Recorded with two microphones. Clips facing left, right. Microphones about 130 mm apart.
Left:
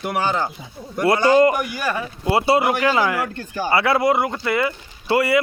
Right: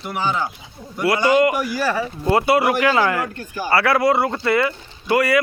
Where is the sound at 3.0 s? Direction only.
10° left (ahead or behind).